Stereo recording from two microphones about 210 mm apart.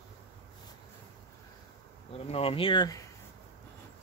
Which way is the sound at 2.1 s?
30° left (ahead or behind).